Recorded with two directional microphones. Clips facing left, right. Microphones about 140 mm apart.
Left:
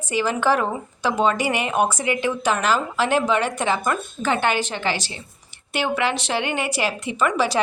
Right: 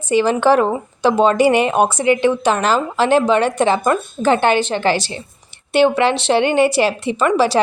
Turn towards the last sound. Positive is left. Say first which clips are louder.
# right 6 dB
turn(degrees=-30)  # may be behind; listen again after turning